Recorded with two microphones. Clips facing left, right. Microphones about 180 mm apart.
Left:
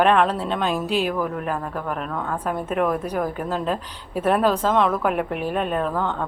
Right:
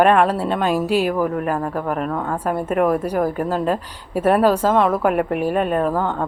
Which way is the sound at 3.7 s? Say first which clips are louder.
Right 4 dB; 5° right (ahead or behind).